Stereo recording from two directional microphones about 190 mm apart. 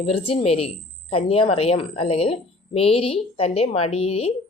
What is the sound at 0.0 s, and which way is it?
A woman's voice, 30° left (ahead or behind).